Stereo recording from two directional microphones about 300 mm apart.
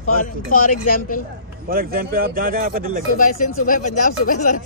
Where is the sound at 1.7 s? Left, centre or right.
Right.